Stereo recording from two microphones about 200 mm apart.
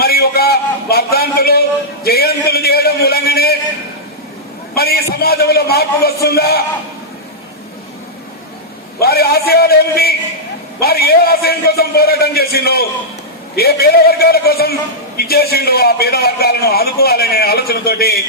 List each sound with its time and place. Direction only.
0.0 s a sound: 50° left (ahead or behind)
4.7 s a man's voice: 50° left (ahead or behind)
9.0 s a man's voice: 50° left (ahead or behind)